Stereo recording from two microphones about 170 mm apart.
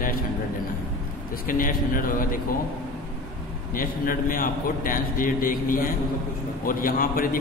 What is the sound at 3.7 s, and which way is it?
A man's voice, 55° left (ahead or behind).